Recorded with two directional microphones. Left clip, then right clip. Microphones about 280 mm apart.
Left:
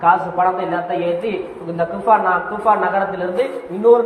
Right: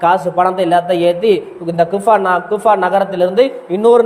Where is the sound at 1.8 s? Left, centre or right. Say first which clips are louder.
Right 4 dB; right.